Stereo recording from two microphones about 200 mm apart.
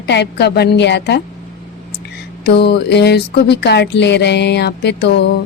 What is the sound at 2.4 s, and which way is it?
Speech, 55° left (ahead or behind).